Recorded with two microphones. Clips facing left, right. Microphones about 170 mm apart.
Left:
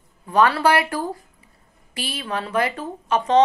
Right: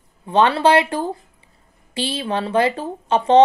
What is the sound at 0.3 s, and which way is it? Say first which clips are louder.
Speech: right 3 dB; 25° right (ahead or behind).